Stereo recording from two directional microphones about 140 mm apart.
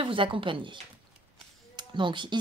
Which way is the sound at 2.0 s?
35° right (ahead or behind).